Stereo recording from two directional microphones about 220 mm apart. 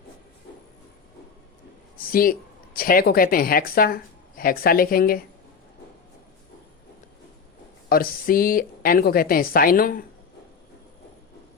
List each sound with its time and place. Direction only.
2.0 s speech: 40° left (ahead or behind)
7.9 s a woman's voice: 40° left (ahead or behind)